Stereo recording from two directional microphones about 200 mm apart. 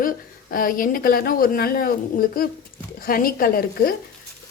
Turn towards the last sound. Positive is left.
turn(degrees=45)  # may be behind; listen again after turning